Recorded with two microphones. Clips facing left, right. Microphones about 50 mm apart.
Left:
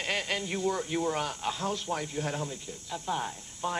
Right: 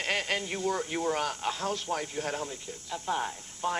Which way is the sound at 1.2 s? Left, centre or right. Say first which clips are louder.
Right 1 dB; right.